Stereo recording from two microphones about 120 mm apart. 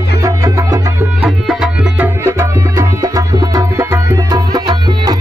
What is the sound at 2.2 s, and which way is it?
Music, 25° right (ahead or behind).